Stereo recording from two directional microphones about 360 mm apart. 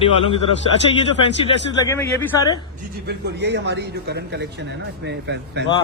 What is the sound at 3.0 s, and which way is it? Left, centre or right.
A man's voice, right.